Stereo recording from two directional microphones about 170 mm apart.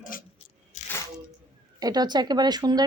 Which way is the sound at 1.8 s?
25° right (ahead or behind).